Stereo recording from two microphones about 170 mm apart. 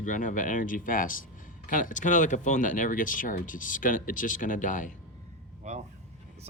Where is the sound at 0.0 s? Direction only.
50° left (ahead or behind).